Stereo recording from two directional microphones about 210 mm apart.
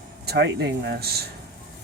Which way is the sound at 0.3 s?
55° right (ahead or behind).